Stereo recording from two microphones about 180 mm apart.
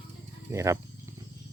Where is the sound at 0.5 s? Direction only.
15° right (ahead or behind).